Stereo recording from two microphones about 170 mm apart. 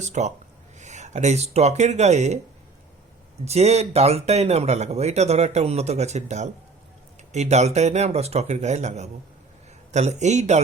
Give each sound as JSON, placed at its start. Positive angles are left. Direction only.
{"t": 0.0, "sound": "a man's voice", "side_deg": -45}
{"t": 3.4, "sound": "a man's voice", "side_deg": -40}